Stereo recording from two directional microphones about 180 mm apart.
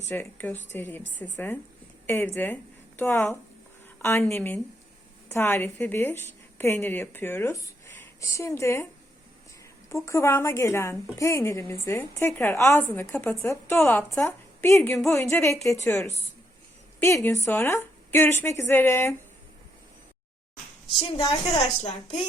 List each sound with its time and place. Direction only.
0.1 s a woman's voice: 10° left (ahead or behind)
2.0 s a woman's voice: 10° left (ahead or behind)
3.9 s a sound: 10° left (ahead or behind)
4.3 s a woman's voice: 10° left (ahead or behind)
9.9 s a woman's voice: 15° left (ahead or behind)
21.2 s a woman's voice: 35° left (ahead or behind)